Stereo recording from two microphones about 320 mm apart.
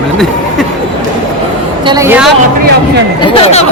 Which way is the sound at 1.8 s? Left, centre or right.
Centre.